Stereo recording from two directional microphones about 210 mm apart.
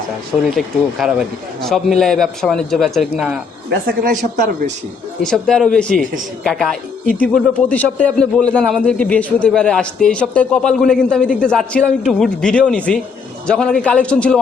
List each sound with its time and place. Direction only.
0.5 s a man's voice: centre (ahead or behind)
3.7 s speech: 45° right (ahead or behind)
5.2 s a man's voice: 5° left (ahead or behind)